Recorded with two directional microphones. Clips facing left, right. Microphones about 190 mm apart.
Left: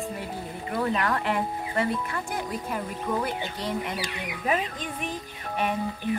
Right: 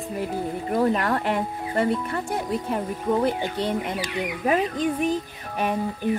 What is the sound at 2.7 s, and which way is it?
Speech, 25° right (ahead or behind).